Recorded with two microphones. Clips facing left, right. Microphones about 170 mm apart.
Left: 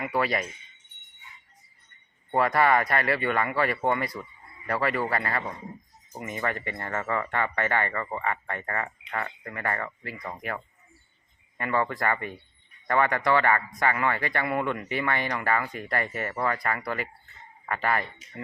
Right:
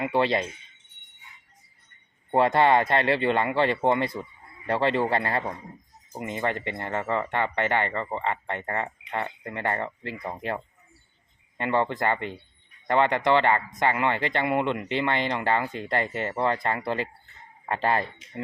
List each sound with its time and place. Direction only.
0.0 s speech: 25° right (ahead or behind)
2.3 s speech: 25° right (ahead or behind)